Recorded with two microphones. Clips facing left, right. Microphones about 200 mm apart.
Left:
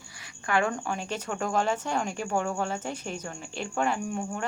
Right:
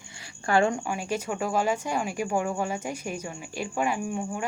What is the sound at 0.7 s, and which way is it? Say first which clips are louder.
Speech: right 3 dB; 10° right (ahead or behind).